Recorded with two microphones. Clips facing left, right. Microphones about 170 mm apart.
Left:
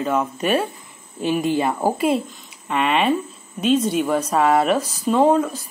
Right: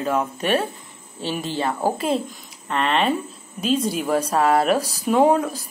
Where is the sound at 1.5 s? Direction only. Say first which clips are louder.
Left 2 dB; 10° left (ahead or behind); by 5.5 s 5° right (ahead or behind).